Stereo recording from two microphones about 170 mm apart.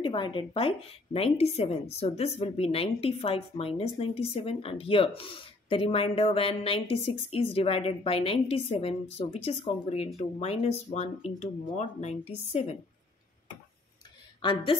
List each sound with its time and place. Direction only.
0.0 s speech: 30° left (ahead or behind)
14.4 s a woman's voice: 30° left (ahead or behind)